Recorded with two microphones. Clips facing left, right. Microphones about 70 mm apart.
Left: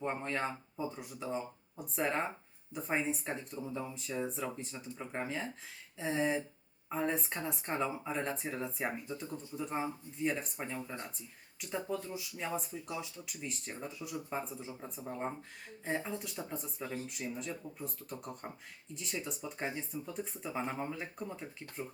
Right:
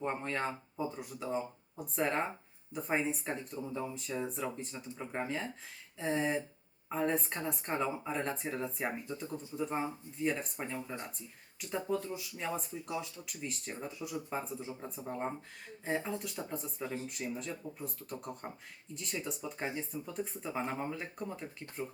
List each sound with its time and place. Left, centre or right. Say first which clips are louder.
0.0 s speech: even; centre
9.7 s speech: right 1 dB; centre
12.1 s speech: even; centre